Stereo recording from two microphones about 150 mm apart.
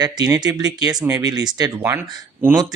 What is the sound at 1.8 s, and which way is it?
Speech, 15° right (ahead or behind).